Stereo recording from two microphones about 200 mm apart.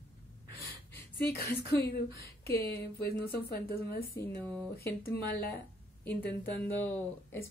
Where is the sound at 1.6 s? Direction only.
55° left (ahead or behind).